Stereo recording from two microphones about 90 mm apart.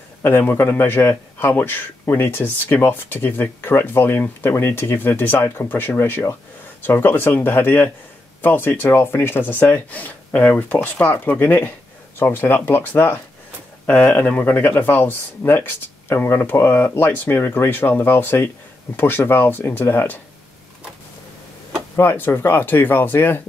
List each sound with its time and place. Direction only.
0.2 s a man's voice: 25° left (ahead or behind)
21.9 s a man's voice: 25° left (ahead or behind)